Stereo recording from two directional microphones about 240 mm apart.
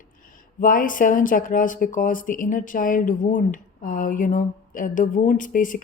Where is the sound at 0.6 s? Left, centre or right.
Left.